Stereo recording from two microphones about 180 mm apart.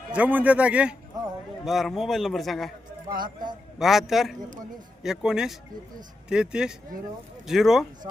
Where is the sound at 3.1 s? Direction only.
50° right (ahead or behind).